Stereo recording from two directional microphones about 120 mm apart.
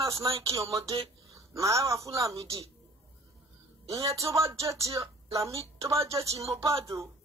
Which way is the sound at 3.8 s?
25° right (ahead or behind).